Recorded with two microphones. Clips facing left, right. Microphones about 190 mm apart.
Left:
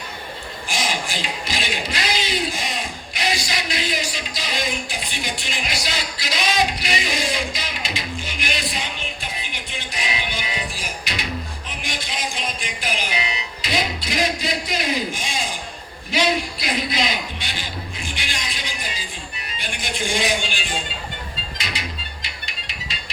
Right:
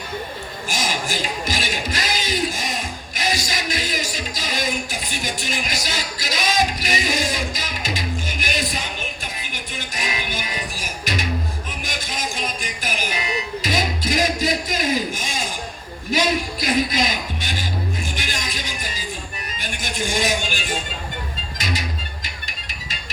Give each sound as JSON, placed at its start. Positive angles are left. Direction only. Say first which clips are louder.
{"t": 0.7, "sound": "speech", "louder": "right 1 dB", "side_deg": -45}
{"t": 9.4, "sound": "music", "louder": "right 1 dB", "side_deg": -45}
{"t": 19.5, "sound": "a sound", "louder": "even", "side_deg": -45}
{"t": 21.6, "sound": "music", "louder": "right 5 dB", "side_deg": -45}